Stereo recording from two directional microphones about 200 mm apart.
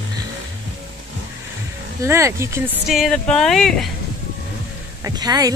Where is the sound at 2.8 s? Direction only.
Centre (ahead or behind).